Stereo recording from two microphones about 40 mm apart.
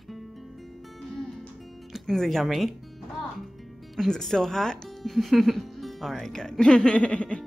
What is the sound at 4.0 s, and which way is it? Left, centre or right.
Speech, centre.